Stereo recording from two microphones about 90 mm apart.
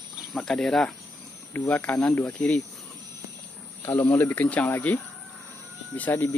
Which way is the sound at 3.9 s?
20° left (ahead or behind).